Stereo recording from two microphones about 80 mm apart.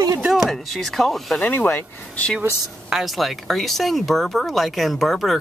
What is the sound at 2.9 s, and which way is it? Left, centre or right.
Speech, centre.